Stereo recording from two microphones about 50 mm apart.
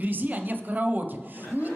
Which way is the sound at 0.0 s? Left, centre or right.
Right.